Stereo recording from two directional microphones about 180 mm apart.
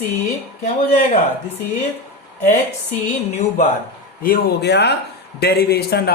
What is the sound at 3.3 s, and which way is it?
Speech, 45° left (ahead or behind).